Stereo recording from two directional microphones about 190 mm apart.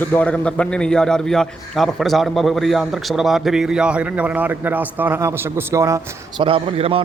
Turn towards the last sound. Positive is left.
turn(degrees=-30)  # may be behind; listen again after turning